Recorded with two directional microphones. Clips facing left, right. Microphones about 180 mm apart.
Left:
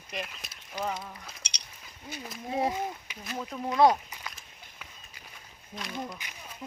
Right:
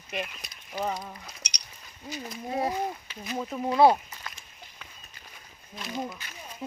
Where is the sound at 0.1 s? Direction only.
Centre (ahead or behind).